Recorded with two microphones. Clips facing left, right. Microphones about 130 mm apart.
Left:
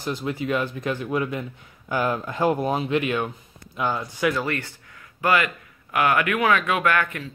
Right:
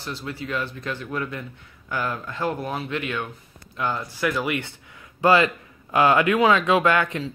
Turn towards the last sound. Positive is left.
turn(degrees=-20)  # may be behind; listen again after turning